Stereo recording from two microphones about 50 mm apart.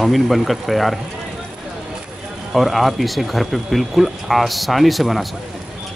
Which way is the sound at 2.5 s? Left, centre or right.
Centre.